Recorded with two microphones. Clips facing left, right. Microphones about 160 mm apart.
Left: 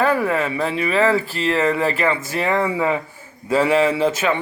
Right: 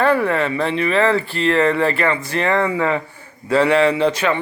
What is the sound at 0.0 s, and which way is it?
Speech, 10° left (ahead or behind).